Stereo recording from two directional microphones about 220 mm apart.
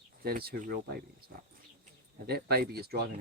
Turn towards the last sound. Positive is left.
turn(degrees=-45)  # may be behind; listen again after turning